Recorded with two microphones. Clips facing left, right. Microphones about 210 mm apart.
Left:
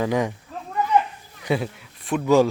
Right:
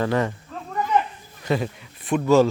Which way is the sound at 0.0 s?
15° left (ahead or behind).